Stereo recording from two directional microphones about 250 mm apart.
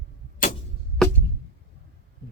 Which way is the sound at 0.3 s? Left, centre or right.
Left.